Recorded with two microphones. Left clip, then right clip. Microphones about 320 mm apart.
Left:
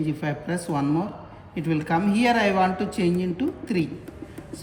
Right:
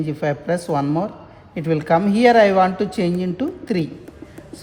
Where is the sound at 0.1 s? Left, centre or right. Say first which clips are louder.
Right 8 dB; right.